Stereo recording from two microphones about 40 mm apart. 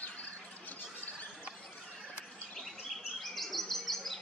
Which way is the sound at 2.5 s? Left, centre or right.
Centre.